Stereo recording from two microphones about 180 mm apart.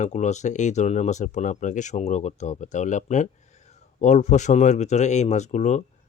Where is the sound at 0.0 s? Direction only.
40° left (ahead or behind).